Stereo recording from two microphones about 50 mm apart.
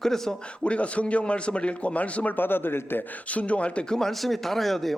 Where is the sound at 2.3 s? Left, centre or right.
Left.